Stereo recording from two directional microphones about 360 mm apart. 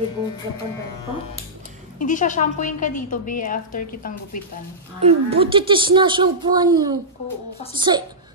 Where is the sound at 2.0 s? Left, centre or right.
Left.